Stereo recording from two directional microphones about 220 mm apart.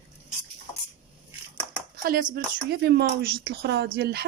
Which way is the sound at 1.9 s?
40° right (ahead or behind).